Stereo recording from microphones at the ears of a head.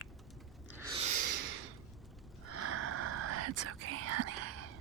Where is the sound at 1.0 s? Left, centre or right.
Right.